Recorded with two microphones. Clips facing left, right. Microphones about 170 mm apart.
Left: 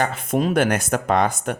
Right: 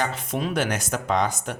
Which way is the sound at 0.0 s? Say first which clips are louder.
Left 5 dB; 55° left (ahead or behind).